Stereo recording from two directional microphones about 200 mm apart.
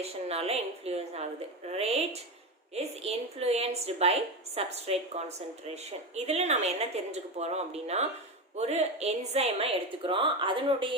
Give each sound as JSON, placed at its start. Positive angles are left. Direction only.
{"t": 0.0, "sound": "a woman's voice", "side_deg": -30}